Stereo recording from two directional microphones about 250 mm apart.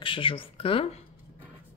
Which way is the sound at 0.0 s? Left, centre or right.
Left.